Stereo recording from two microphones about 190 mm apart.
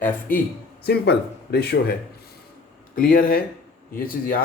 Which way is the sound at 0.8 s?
60° left (ahead or behind).